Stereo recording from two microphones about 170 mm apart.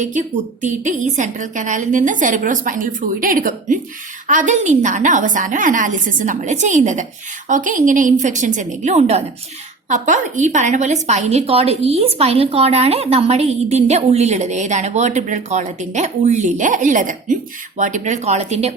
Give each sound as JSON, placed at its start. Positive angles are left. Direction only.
{"t": 0.0, "sound": "a woman's voice", "side_deg": -50}